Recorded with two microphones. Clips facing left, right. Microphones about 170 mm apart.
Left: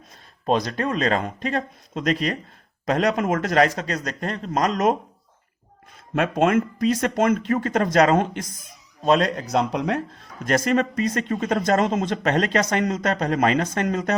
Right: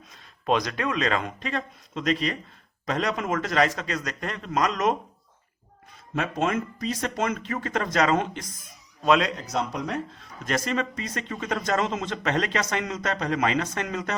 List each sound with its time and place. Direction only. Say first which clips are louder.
0.4 s speech: left 3 dB; 35° left (ahead or behind)
6.1 s speech: left 6 dB; 55° left (ahead or behind)
9.3 s speech: left 6 dB; 60° left (ahead or behind)
10.4 s speech: left 6 dB; 45° left (ahead or behind)